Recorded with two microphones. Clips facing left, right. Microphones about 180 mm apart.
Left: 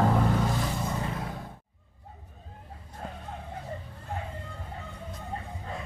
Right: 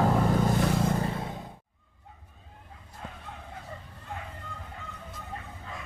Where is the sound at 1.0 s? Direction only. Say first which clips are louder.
Right 2 dB; 25° right (ahead or behind).